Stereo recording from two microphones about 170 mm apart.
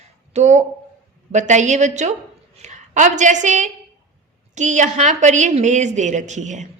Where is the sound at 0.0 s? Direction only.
40° right (ahead or behind).